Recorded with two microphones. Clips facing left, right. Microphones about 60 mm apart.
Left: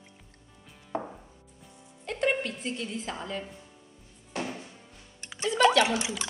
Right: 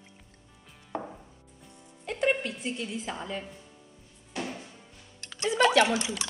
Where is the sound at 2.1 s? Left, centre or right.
Centre.